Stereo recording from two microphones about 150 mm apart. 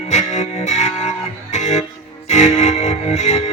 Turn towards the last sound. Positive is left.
turn(degrees=45)  # may be behind; listen again after turning